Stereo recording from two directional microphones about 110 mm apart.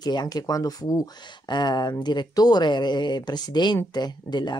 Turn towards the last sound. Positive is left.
turn(degrees=40)  # may be behind; listen again after turning